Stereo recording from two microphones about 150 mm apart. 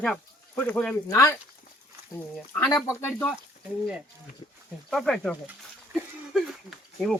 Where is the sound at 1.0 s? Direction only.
20° left (ahead or behind).